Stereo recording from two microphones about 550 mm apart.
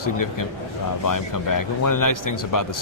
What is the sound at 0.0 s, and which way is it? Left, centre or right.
Speech, left.